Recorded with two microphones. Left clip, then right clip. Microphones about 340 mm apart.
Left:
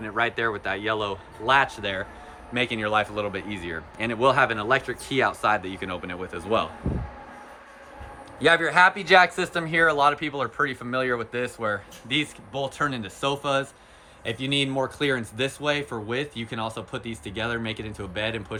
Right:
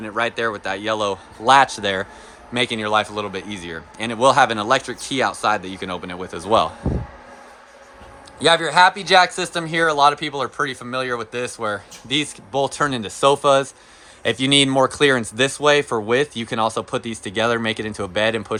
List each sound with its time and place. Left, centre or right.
0.0 s speech: centre
8.4 s speech: centre